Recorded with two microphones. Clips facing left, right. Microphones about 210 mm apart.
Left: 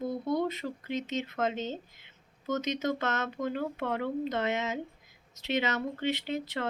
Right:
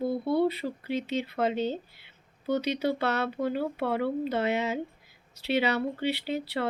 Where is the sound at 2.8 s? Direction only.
35° right (ahead or behind).